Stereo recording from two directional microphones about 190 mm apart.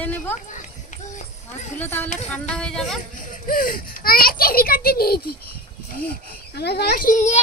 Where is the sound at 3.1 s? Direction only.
45° left (ahead or behind).